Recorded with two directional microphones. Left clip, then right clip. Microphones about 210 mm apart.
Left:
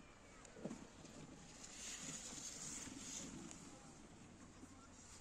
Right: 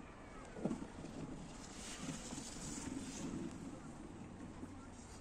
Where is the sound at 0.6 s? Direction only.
20° left (ahead or behind).